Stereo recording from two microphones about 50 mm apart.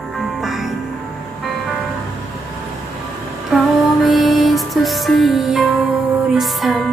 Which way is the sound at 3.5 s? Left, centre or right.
Centre.